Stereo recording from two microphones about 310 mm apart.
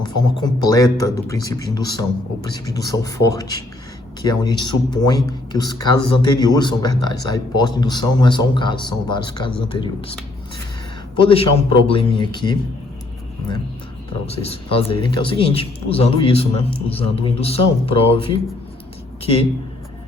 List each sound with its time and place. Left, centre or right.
0.0 s speech: centre
11.9 s speech: centre
14.3 s speech: centre